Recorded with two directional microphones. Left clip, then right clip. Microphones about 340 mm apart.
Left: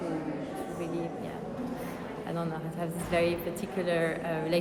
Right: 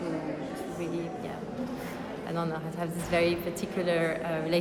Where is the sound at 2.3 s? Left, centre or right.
Centre.